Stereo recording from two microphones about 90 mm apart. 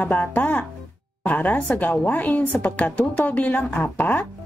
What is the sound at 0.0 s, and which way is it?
A woman's voice, 20° left (ahead or behind).